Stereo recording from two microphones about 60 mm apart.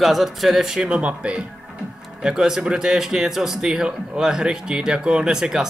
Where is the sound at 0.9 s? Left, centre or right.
Centre.